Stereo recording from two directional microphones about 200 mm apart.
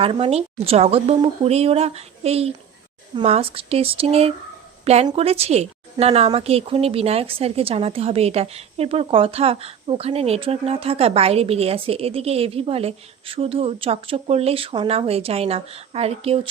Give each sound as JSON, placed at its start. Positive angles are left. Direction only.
{"t": 0.0, "sound": "speech", "side_deg": -30}